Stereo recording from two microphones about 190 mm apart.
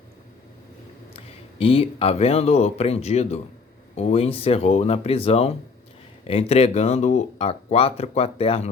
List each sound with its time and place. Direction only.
1.1 s speech: 30° left (ahead or behind)